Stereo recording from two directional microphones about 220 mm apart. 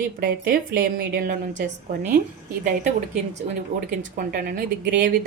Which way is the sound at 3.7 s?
40° right (ahead or behind).